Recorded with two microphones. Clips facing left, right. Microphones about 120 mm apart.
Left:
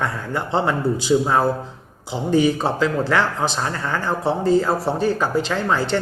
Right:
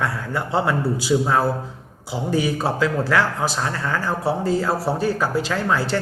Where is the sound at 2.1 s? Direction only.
5° right (ahead or behind).